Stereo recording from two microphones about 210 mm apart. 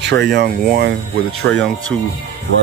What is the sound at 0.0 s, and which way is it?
Speech, 55° right (ahead or behind).